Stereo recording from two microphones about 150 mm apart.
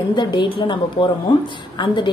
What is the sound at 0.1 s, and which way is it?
A woman's voice, 30° left (ahead or behind).